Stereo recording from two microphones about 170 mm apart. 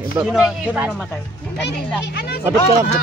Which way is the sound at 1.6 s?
80° left.